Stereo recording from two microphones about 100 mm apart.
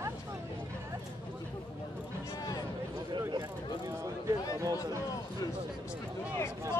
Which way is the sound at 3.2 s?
40° right (ahead or behind).